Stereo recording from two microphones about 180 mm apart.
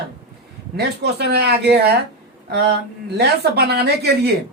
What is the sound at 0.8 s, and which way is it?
Speech, 65° right (ahead or behind).